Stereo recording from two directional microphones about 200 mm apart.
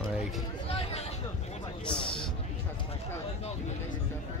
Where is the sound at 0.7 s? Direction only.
30° left (ahead or behind).